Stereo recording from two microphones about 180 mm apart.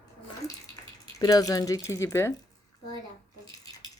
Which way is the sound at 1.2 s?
20° left (ahead or behind).